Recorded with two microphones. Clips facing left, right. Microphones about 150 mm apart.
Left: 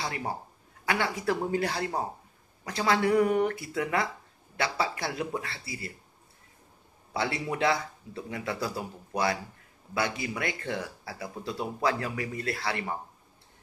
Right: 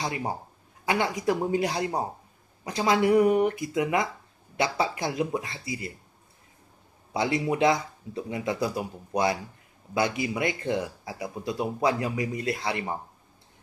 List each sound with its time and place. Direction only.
0.0 s speech: 20° right (ahead or behind)
7.2 s speech: 20° right (ahead or behind)